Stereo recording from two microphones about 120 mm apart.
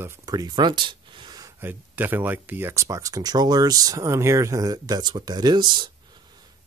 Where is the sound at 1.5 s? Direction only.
15° right (ahead or behind).